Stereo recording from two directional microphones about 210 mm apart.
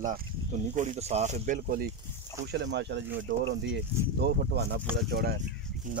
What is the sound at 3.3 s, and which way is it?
Speech, 40° right (ahead or behind).